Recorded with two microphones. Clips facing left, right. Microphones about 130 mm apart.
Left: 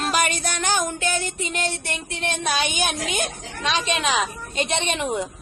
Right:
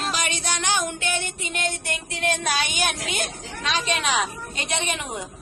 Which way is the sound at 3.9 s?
25° left (ahead or behind).